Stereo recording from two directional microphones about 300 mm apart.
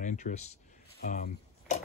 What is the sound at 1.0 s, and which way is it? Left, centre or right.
Tick-tock, left.